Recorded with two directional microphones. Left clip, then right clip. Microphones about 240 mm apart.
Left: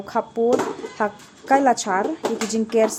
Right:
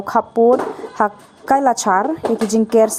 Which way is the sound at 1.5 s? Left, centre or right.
Right.